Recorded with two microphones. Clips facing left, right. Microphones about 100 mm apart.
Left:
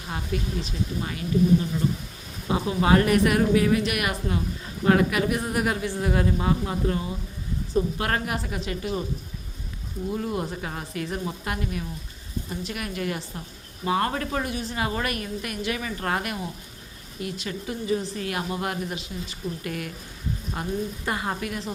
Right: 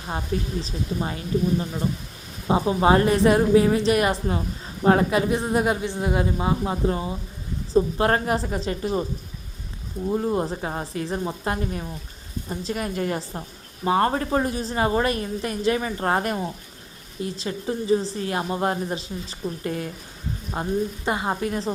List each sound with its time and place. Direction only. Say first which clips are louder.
0.6 s a woman's voice: right 2 dB; 30° right (ahead or behind)
10.1 s a woman's voice: right 5 dB; 30° right (ahead or behind)